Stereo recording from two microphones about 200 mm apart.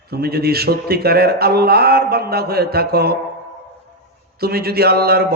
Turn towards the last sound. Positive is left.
turn(degrees=-50)  # may be behind; listen again after turning